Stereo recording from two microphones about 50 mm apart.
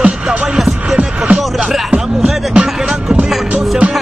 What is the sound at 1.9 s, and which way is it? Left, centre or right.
Music, right.